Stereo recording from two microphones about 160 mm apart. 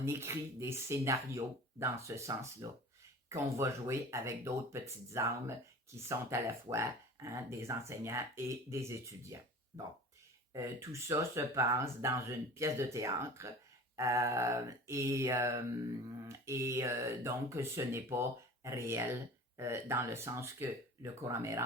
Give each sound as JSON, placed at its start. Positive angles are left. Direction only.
{"t": 0.0, "sound": "speech", "side_deg": -15}
{"t": 13.9, "sound": "a sound", "side_deg": -20}
{"t": 16.5, "sound": "speech", "side_deg": -20}